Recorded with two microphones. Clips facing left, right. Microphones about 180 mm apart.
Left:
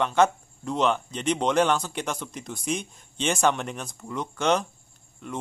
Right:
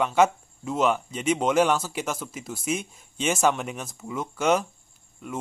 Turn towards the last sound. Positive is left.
turn(degrees=-5)  # may be behind; listen again after turning